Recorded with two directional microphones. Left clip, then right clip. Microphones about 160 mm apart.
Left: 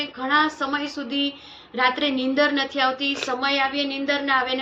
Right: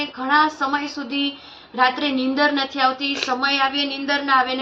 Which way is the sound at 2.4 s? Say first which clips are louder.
Right 2 dB; 10° left (ahead or behind).